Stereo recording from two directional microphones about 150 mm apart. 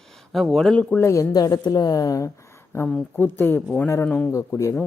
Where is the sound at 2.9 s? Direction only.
10° left (ahead or behind).